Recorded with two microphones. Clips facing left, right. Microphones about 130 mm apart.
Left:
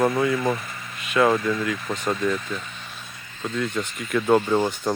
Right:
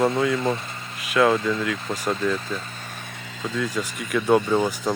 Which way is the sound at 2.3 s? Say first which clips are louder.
Right 1 dB; 35° right (ahead or behind).